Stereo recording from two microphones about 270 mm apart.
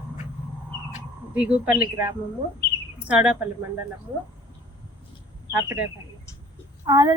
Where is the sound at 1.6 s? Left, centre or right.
Centre.